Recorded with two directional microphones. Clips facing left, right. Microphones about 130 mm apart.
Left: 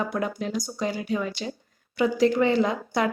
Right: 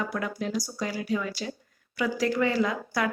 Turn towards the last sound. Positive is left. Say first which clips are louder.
# left 3 dB
turn(degrees=25)  # may be behind; listen again after turning